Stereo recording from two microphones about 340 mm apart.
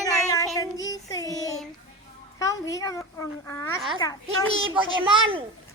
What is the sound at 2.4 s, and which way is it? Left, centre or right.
Speech, centre.